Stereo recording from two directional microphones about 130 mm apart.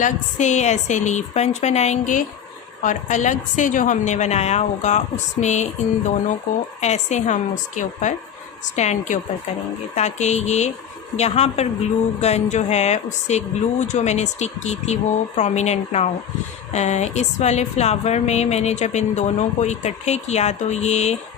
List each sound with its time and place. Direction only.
0.0 s a woman's voice: 65° left (ahead or behind)
6.8 s a woman's voice: 65° left (ahead or behind)